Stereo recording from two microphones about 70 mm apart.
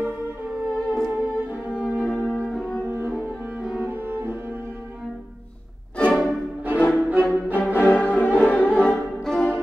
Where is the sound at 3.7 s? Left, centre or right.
Right.